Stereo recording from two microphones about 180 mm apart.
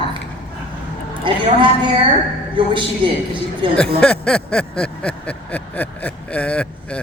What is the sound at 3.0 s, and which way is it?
Speech, 30° right (ahead or behind).